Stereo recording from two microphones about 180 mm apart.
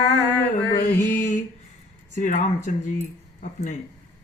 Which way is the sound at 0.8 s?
45° left (ahead or behind).